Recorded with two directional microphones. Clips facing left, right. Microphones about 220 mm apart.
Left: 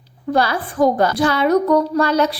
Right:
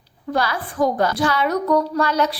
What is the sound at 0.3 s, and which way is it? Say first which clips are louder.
A woman's voice: left 4 dB; 25° left (ahead or behind).